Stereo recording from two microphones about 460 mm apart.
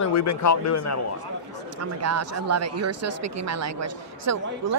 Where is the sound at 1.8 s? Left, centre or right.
Right.